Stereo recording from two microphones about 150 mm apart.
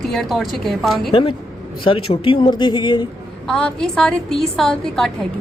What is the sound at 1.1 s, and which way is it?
Speech, 35° left (ahead or behind).